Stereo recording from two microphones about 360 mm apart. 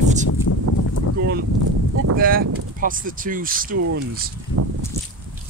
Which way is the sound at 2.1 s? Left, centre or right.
Right.